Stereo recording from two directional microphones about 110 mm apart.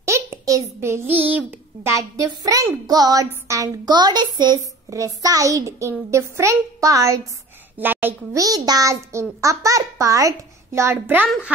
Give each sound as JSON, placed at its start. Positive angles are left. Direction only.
{"t": 0.0, "sound": "a sound", "side_deg": -25}
{"t": 1.3, "sound": "a child's voice", "side_deg": -20}
{"t": 7.8, "sound": "a woman's voice", "side_deg": -20}
{"t": 8.4, "sound": "a child's voice", "side_deg": -35}